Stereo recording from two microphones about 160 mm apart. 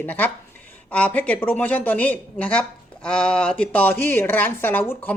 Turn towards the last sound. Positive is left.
turn(degrees=10)  # may be behind; listen again after turning